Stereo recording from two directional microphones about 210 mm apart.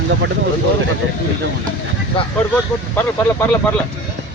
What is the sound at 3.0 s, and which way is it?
Speech, 10° left (ahead or behind).